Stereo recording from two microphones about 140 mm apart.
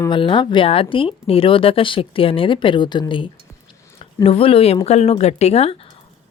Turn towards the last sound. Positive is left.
turn(degrees=45)  # may be behind; listen again after turning